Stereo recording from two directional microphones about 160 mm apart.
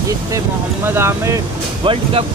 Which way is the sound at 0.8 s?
15° right (ahead or behind).